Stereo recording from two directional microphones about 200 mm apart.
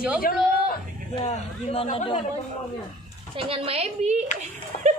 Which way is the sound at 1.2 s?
30° left (ahead or behind).